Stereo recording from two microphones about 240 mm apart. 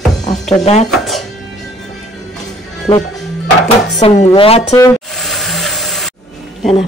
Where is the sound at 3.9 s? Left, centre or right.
Left.